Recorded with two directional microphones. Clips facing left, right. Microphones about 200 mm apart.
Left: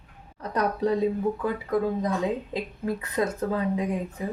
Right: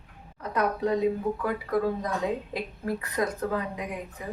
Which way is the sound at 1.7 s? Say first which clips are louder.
Left 2 dB; 20° left (ahead or behind).